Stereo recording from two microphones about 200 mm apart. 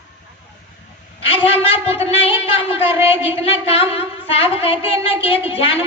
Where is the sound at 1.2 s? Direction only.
30° left (ahead or behind).